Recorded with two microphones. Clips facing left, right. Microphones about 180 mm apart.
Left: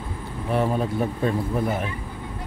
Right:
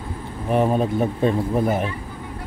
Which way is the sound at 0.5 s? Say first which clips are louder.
Right 4 dB; 20° right (ahead or behind).